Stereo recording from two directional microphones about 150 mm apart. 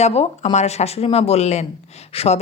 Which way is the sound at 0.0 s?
45° left (ahead or behind).